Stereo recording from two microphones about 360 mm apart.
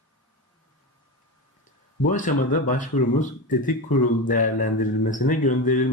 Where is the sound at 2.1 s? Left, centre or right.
Left.